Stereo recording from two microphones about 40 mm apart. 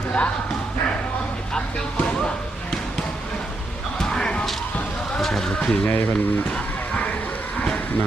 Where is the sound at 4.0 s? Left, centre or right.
Centre.